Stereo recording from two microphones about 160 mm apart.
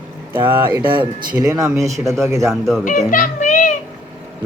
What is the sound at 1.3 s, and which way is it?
Speech, 20° right (ahead or behind).